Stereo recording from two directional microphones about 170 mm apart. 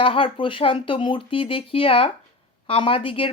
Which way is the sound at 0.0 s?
30° left (ahead or behind).